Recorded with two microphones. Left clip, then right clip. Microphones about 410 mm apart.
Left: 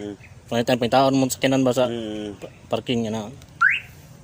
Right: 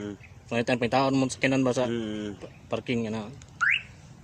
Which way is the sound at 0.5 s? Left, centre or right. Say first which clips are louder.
Left 6 dB; right.